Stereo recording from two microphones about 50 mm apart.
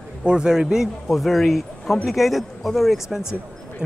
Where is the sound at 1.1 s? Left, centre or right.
Centre.